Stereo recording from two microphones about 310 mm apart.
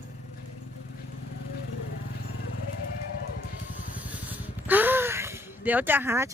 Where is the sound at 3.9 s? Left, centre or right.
Centre.